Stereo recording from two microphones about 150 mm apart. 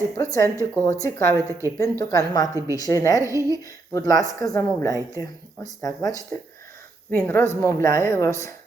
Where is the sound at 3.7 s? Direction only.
25° left (ahead or behind).